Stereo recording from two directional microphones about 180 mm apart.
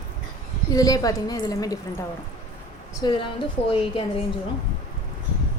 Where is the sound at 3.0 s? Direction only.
25° left (ahead or behind).